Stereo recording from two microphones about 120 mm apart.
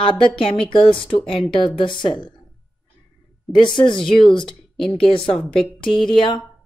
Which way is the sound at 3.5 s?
40° left (ahead or behind).